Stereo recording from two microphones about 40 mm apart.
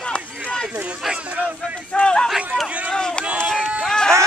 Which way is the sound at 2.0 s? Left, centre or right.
Left.